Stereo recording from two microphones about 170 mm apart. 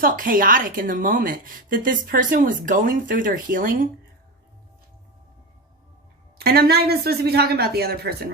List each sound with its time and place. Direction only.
0.0 s a woman's voice: 55° right (ahead or behind)
6.4 s speech: 65° right (ahead or behind)